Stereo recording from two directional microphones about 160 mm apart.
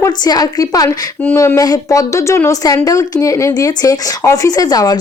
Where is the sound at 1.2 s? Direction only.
10° left (ahead or behind).